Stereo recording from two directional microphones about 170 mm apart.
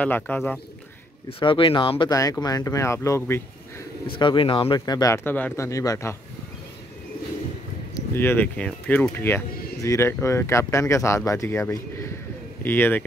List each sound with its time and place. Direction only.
0.0 s speech: 10° left (ahead or behind)
1.4 s speech: 30° left (ahead or behind); by 3.8 s 15° left (ahead or behind)
4.2 s speech: 30° left (ahead or behind)
7.9 s speech: 15° left (ahead or behind)